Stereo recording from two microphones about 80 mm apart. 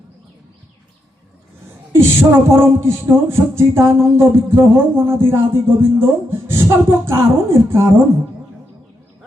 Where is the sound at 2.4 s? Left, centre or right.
Right.